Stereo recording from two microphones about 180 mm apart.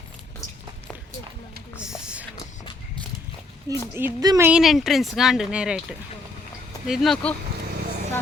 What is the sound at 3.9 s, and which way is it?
Speech, 15° right (ahead or behind).